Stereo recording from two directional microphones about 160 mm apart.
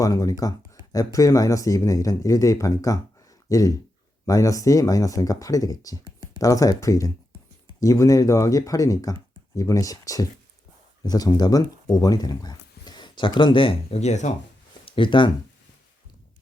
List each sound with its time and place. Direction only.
0.0 s speech: 20° left (ahead or behind); by 14.3 s 45° left (ahead or behind)
14.8 s speech: 30° left (ahead or behind)